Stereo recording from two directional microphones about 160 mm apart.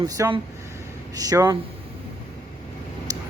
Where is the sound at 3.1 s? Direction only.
20° right (ahead or behind).